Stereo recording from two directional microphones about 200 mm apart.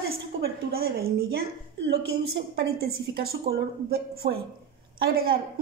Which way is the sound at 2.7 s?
50° right (ahead or behind).